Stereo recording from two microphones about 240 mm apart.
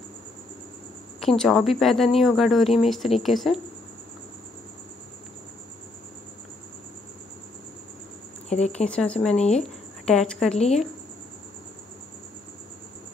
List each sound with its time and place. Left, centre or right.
1.2 s speech: centre
8.5 s speech: left
8.8 s speech: centre